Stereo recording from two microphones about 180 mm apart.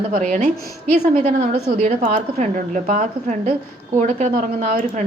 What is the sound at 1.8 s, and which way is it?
A woman's voice, 45° right (ahead or behind).